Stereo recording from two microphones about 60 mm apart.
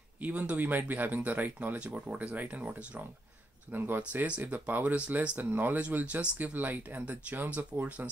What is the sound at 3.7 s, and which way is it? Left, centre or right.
Speech, right.